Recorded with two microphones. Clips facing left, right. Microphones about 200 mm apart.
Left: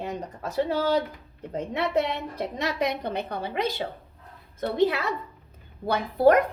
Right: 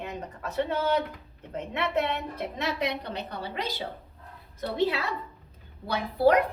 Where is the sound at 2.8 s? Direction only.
50° left (ahead or behind).